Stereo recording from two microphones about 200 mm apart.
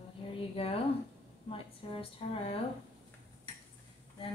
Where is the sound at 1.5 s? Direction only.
25° left (ahead or behind).